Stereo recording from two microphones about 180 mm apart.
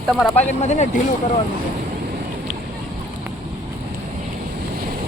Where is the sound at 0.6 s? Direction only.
40° left (ahead or behind).